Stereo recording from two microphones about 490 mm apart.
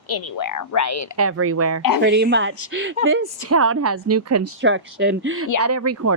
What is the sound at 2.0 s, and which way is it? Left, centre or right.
A woman's voice, right.